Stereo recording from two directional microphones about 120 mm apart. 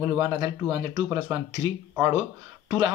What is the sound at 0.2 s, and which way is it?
Speech, 45° right (ahead or behind).